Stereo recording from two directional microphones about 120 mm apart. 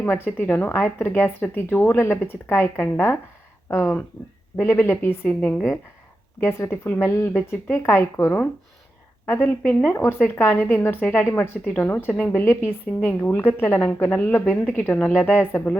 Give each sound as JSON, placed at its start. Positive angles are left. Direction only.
{"t": 0.0, "sound": "a woman's voice", "side_deg": 20}